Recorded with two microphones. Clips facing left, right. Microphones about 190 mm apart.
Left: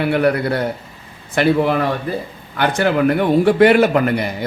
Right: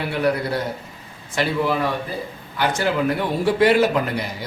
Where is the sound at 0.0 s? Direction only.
60° left (ahead or behind).